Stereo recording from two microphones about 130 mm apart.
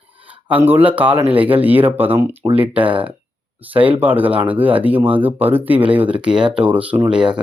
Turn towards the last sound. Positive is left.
turn(degrees=-5)  # may be behind; listen again after turning